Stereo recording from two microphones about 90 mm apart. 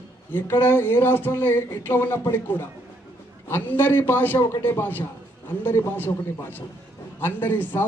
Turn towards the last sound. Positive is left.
turn(degrees=20)  # may be behind; listen again after turning